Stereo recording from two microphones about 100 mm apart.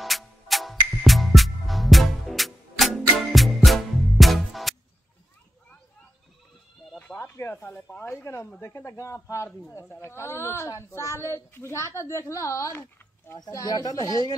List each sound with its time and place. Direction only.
0.0 s music: centre (ahead or behind)
7.0 s a sound: 15° left (ahead or behind)
7.3 s speech: 20° left (ahead or behind); by 14.2 s 40° left (ahead or behind)